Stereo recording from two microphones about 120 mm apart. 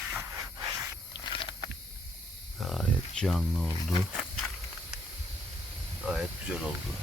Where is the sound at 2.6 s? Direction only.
Centre (ahead or behind).